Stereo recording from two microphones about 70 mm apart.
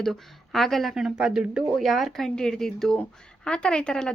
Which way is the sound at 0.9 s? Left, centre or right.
Centre.